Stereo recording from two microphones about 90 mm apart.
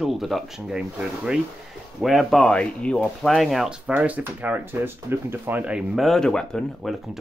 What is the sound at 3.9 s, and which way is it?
Speech, 15° right (ahead or behind).